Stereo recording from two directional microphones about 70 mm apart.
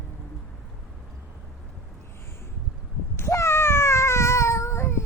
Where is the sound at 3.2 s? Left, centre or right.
Left.